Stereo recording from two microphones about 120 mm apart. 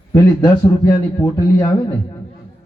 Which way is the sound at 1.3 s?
35° left (ahead or behind).